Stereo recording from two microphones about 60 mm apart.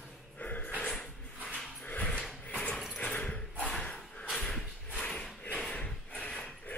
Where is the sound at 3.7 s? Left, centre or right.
Centre.